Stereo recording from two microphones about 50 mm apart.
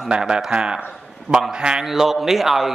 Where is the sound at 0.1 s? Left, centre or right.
Centre.